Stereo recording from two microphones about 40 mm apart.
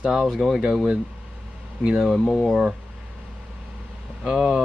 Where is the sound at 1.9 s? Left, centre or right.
Centre.